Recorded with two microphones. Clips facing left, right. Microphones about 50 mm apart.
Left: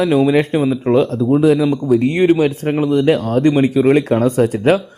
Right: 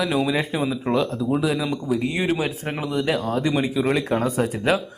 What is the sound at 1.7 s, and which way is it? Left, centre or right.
Speech, left.